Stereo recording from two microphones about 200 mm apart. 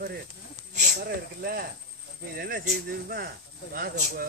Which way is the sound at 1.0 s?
50° right (ahead or behind).